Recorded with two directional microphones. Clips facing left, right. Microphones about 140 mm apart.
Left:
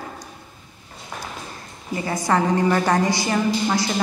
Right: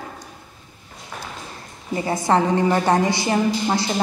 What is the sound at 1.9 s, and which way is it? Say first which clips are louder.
A woman's voice: right 2 dB; 25° right (ahead or behind).